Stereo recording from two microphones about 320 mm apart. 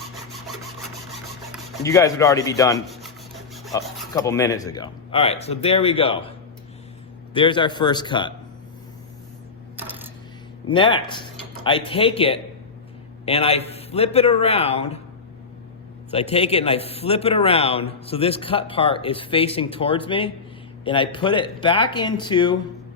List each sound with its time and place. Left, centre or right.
0.3 s wood: centre
1.8 s a man's voice: centre
2.7 s rub: centre
4.1 s a man's voice: centre
7.3 s a man's voice: centre
9.7 s a sound: centre
10.7 s a man's voice: centre
16.1 s a man's voice: centre